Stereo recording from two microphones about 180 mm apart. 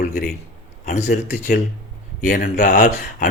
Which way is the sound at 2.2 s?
50° left (ahead or behind).